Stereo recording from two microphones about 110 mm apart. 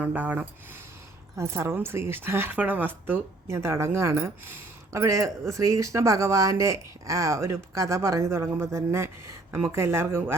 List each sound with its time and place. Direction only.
0.0 s speech: 15° right (ahead or behind)
1.4 s speech: 25° right (ahead or behind)